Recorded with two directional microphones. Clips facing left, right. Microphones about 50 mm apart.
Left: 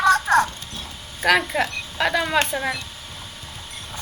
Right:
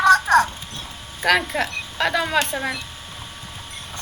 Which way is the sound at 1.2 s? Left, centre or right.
Centre.